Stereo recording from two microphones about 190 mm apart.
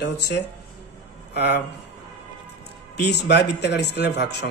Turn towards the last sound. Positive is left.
turn(degrees=65)  # may be behind; listen again after turning